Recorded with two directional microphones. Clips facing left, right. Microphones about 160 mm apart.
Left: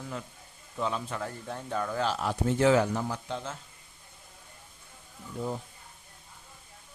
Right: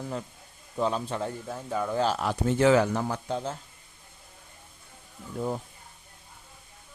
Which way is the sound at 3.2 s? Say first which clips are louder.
Right 5 dB; 40° right (ahead or behind).